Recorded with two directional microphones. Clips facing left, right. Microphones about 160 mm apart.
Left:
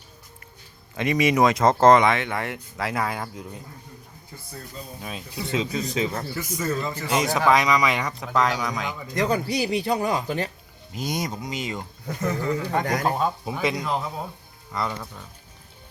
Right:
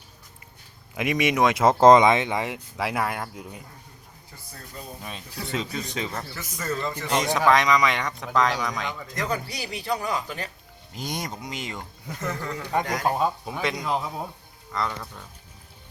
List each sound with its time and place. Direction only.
0.9 s speech: centre (ahead or behind)
5.0 s speech: 5° left (ahead or behind)
9.1 s speech: 30° left (ahead or behind)
10.9 s speech: 5° left (ahead or behind)
11.7 s speech: 10° left (ahead or behind)